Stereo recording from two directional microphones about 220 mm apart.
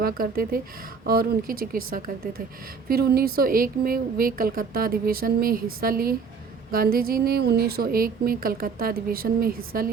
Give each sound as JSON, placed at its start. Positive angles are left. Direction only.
{"t": 0.0, "sound": "a woman's voice", "side_deg": -40}